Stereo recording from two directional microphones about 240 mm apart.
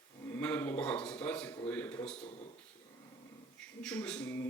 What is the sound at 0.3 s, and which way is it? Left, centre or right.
A man's voice, centre.